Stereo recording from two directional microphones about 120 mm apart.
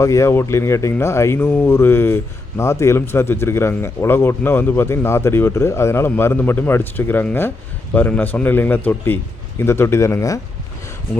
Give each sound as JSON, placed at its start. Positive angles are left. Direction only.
{"t": 0.0, "sound": "a man's voice", "side_deg": 25}